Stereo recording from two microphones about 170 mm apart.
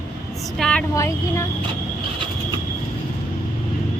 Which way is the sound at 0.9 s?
15° left (ahead or behind).